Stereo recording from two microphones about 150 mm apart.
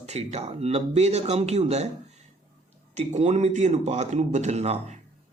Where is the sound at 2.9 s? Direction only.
50° right (ahead or behind).